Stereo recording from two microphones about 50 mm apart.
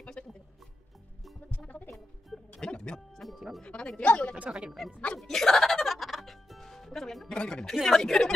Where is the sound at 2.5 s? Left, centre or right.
Centre.